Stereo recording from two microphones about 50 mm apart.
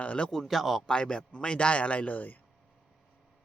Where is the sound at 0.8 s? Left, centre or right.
Centre; by 2.4 s left.